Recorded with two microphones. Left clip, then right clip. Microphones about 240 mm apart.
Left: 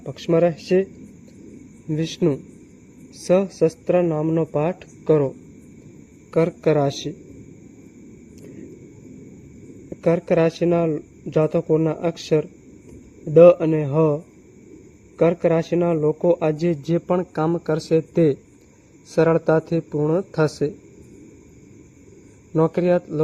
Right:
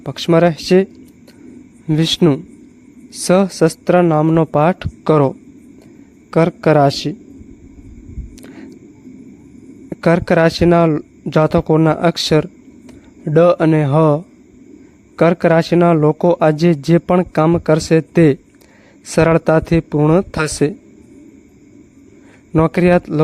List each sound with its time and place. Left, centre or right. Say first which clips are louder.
0.0 s a man's voice: right 6 dB; right
1.9 s a man's voice: right 8 dB; right
6.3 s a man's voice: right 6 dB; right
9.9 s a man's voice: right 5 dB; right
22.5 s a man's voice: right 6 dB; right